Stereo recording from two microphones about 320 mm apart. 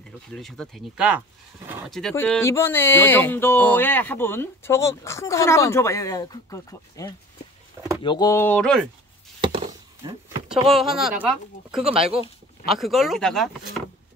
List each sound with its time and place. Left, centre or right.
0.3 s speech: centre
9.4 s chop: centre
10.5 s speech: centre